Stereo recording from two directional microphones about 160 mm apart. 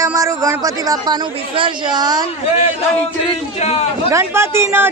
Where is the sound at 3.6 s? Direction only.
40° left (ahead or behind).